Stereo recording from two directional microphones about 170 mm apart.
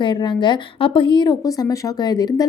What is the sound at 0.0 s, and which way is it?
Speech, 30° left (ahead or behind).